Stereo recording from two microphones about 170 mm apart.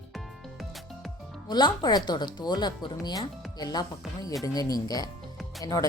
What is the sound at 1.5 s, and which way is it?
Speech, 25° left (ahead or behind).